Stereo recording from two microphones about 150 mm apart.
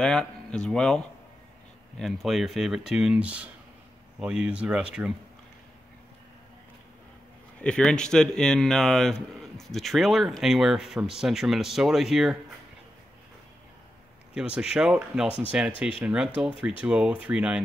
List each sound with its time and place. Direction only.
0.0 s a man's voice: 5° left (ahead or behind)
7.6 s a man's voice: 5° left (ahead or behind)
14.3 s a man's voice: 5° right (ahead or behind)